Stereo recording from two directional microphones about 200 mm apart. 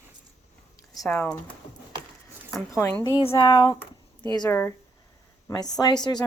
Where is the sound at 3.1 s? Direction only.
25° left (ahead or behind).